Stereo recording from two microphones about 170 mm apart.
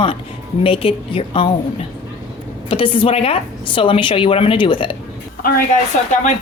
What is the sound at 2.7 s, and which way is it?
A woman's voice, 30° left (ahead or behind).